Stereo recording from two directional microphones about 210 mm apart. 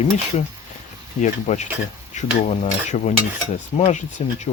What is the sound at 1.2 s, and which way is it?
Dishes, 35° left (ahead or behind).